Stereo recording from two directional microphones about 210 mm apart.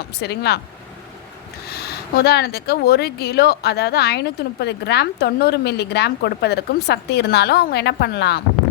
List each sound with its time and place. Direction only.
0.2 s speech: 50° left (ahead or behind)
1.7 s speech: 50° left (ahead or behind)